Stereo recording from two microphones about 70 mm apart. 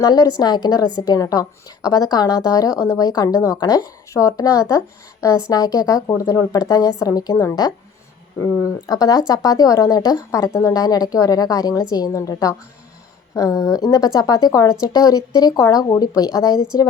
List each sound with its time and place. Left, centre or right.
0.0 s a woman's voice: left
0.9 s a woman's voice: left
2.5 s a woman's voice: left
3.3 s speech: left
3.6 s speech: left
4.1 s speech: left
5.5 s a woman's voice: left
7.0 s a woman's voice: left
8.6 s a woman's voice: left
10.3 s a woman's voice: left